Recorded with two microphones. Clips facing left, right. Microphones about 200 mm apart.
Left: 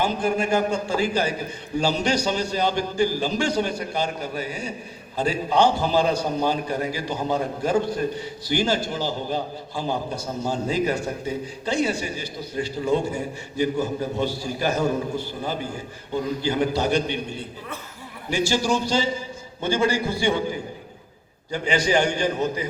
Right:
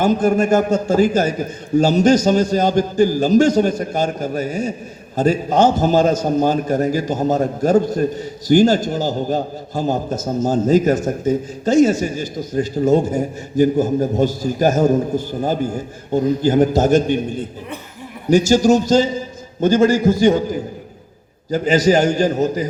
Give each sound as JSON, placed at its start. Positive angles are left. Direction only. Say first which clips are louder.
{"t": 0.0, "sound": "a man's voice", "louder": "right 8 dB", "side_deg": -45}